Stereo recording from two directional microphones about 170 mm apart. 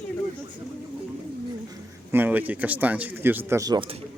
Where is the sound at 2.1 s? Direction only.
10° right (ahead or behind); by 4.0 s 30° right (ahead or behind).